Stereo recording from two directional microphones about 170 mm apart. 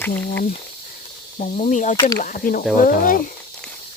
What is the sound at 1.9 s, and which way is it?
Speech, 25° left (ahead or behind).